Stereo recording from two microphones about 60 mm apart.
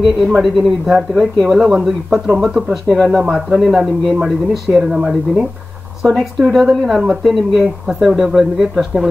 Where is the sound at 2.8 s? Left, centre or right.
Centre.